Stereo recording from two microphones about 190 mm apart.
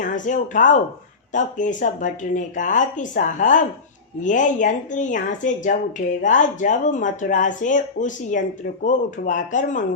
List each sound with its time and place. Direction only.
0.0 s speech: 40° left (ahead or behind)